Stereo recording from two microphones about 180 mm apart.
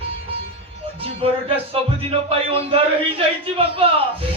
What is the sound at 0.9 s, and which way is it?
Speech, 30° right (ahead or behind).